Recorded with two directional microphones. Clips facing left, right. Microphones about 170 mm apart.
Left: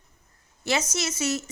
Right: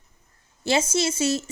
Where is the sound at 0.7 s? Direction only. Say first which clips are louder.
Right 5 dB; 30° right (ahead or behind).